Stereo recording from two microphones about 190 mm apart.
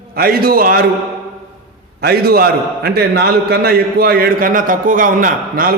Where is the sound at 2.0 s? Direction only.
55° right (ahead or behind).